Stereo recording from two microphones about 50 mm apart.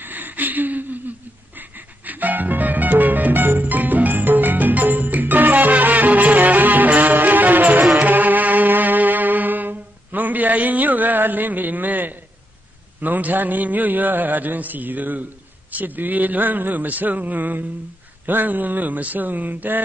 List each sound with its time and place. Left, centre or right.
0.0 s a sound: right
1.6 s music: right
13.0 s a man's voice: right